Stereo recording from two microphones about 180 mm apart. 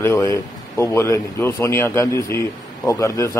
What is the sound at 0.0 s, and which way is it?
A man's voice, 15° left (ahead or behind).